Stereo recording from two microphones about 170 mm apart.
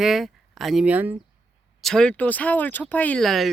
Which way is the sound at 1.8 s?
5° left (ahead or behind).